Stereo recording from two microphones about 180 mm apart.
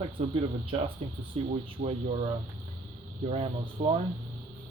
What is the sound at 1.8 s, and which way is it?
Speech, 35° right (ahead or behind).